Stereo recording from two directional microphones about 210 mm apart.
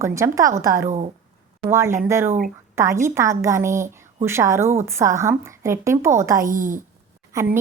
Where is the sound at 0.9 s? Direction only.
30° right (ahead or behind).